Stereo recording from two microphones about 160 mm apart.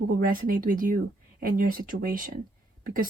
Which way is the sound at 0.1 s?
60° right (ahead or behind).